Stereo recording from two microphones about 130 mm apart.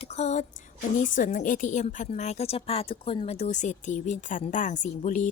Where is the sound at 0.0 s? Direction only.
60° left (ahead or behind).